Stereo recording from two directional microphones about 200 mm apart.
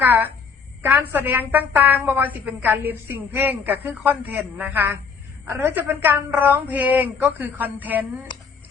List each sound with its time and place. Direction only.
0.0 s a woman's voice: 10° right (ahead or behind)